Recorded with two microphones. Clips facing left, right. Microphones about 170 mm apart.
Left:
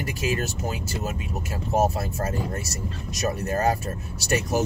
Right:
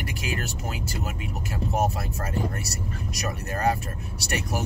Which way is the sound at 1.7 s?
25° left (ahead or behind).